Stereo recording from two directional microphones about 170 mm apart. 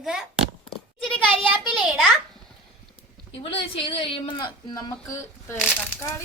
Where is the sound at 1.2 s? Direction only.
10° right (ahead or behind).